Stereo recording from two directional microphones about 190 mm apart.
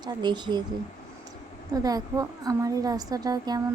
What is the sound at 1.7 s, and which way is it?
Speech, 20° right (ahead or behind).